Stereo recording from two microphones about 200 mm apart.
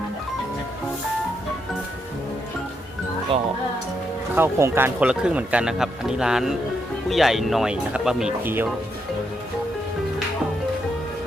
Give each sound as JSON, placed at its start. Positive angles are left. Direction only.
{"t": 3.3, "sound": "speech", "side_deg": -30}
{"t": 4.4, "sound": "speech", "side_deg": -10}